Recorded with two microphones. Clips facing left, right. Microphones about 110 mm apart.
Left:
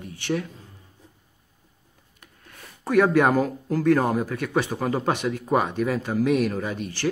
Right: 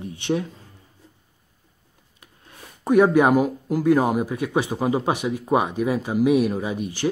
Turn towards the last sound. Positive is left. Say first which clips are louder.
# right 2 dB
turn(degrees=-15)  # may be behind; listen again after turning